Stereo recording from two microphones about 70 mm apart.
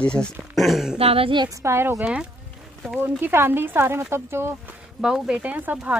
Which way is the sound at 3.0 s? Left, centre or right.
Right.